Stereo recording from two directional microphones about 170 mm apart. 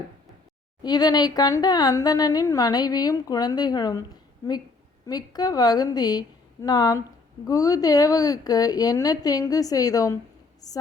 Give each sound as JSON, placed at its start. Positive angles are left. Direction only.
{"t": 0.8, "sound": "a woman's voice", "side_deg": 25}